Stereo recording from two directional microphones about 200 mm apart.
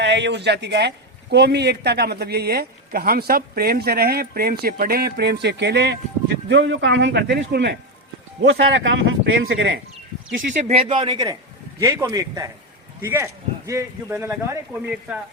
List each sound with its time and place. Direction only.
0.0 s a man's voice: 60° right (ahead or behind)
8.4 s a man's voice: 70° right (ahead or behind)
10.6 s a man's voice: 30° right (ahead or behind); by 15.2 s 10° right (ahead or behind)